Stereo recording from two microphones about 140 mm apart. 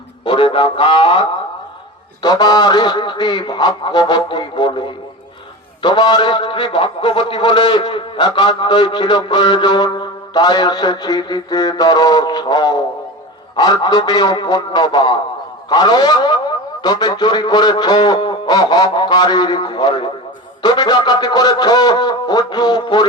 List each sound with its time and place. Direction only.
0.3 s a man's voice: 35° left (ahead or behind)